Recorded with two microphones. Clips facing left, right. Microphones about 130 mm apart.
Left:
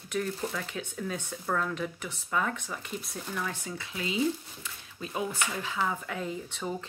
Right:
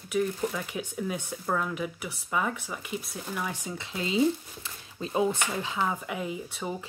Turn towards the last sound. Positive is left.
turn(degrees=-10)  # may be behind; listen again after turning